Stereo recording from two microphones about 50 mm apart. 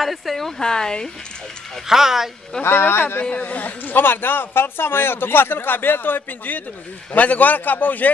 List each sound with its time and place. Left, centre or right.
0.0 s speech: centre
1.9 s speech: centre
2.6 s a man's voice: left
3.3 s a man's voice: left